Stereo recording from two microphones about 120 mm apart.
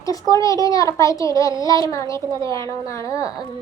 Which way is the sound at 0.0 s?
30° left (ahead or behind).